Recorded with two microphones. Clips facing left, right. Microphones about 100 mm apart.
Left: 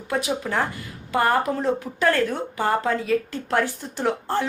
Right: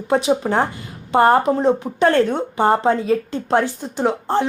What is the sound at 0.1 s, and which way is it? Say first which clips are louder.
A woman's voice: right 7 dB; 30° right (ahead or behind).